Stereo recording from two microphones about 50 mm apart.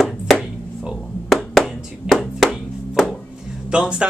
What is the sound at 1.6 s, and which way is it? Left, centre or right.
Hands, centre.